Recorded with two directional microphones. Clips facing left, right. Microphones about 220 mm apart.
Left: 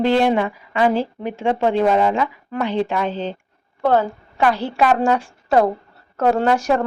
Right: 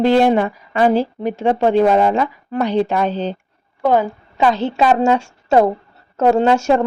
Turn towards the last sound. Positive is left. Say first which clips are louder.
# right 4 dB
turn(degrees=-25)  # may be behind; listen again after turning